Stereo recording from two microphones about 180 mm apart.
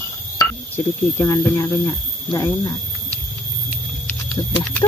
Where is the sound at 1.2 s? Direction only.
20° left (ahead or behind).